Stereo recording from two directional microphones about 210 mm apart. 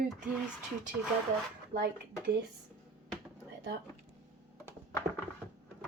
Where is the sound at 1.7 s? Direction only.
45° right (ahead or behind).